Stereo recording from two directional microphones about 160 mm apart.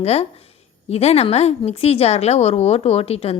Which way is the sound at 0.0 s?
40° left (ahead or behind).